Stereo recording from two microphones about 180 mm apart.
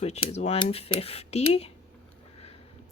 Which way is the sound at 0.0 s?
35° left (ahead or behind).